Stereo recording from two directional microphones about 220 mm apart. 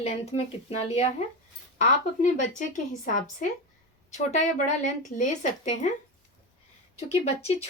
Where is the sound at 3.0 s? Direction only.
35° left (ahead or behind).